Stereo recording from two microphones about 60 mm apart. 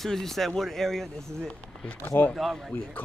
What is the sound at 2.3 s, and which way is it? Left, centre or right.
Speech, centre.